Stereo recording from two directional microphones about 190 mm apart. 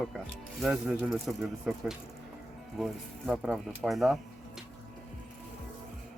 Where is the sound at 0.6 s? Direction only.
Centre (ahead or behind).